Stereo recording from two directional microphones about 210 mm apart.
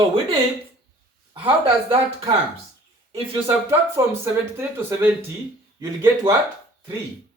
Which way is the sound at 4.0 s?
10° right (ahead or behind).